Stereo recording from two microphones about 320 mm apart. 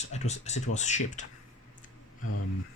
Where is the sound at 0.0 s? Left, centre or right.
Left.